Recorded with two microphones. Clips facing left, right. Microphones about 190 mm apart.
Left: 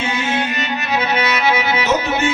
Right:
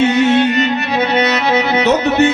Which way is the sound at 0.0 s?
65° right (ahead or behind).